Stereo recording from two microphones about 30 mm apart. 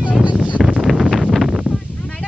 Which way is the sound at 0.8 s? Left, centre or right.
Centre.